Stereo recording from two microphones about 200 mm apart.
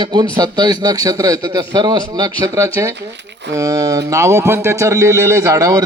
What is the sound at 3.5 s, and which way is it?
A man's voice, 15° right (ahead or behind).